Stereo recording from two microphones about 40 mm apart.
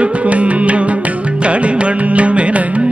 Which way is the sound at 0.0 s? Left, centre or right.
Right.